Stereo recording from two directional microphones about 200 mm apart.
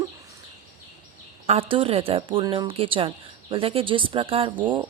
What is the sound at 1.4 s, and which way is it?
Speech, 25° right (ahead or behind).